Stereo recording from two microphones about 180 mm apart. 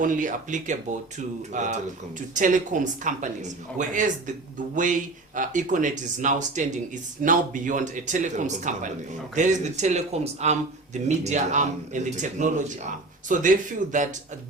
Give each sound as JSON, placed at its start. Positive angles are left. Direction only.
{"t": 0.0, "sound": "speech", "side_deg": -45}